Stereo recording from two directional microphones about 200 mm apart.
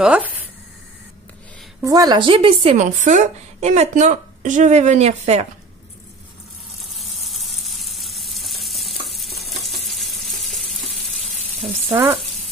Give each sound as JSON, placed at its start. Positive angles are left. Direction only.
{"t": 0.0, "sound": "speech", "side_deg": -5}
{"t": 1.8, "sound": "a woman's voice", "side_deg": -20}
{"t": 6.8, "sound": "sizzle", "side_deg": 0}
{"t": 7.2, "sound": "frying", "side_deg": 0}